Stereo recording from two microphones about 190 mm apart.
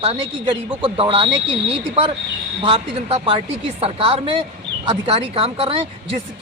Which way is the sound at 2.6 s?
30° right (ahead or behind).